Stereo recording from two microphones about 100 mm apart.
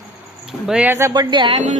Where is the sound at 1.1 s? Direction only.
45° right (ahead or behind).